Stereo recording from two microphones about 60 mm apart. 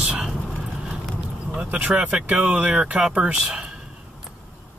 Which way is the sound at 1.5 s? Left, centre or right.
Centre.